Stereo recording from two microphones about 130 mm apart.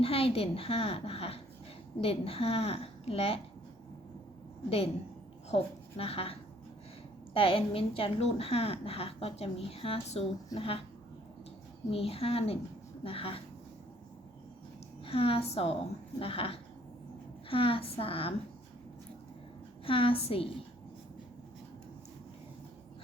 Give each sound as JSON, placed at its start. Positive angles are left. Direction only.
{"t": 0.0, "sound": "a woman's voice", "side_deg": 45}
{"t": 5.5, "sound": "a woman's voice", "side_deg": 55}
{"t": 7.3, "sound": "a woman's voice", "side_deg": 45}
{"t": 11.9, "sound": "a woman's voice", "side_deg": 50}
{"t": 15.0, "sound": "a woman's voice", "side_deg": 45}
{"t": 19.8, "sound": "a woman's voice", "side_deg": 45}